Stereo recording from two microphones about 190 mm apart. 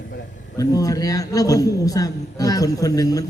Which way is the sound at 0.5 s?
20° left (ahead or behind).